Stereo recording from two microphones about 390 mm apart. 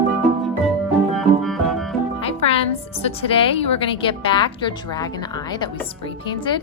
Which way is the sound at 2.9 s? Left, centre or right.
Centre.